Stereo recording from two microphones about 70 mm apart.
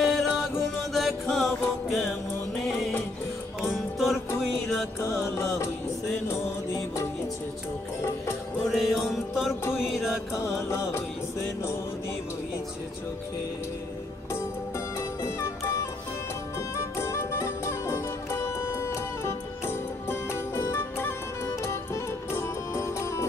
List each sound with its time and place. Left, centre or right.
0.0 s music: centre
3.7 s music: centre
5.2 s music: left
8.6 s music: centre
10.7 s music: left
15.0 s music: left